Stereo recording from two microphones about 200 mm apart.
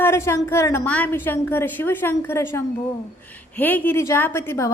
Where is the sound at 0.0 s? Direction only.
15° left (ahead or behind).